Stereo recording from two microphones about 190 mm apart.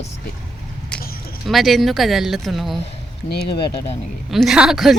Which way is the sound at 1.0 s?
50° left (ahead or behind).